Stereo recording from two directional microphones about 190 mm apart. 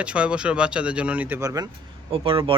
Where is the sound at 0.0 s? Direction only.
5° right (ahead or behind).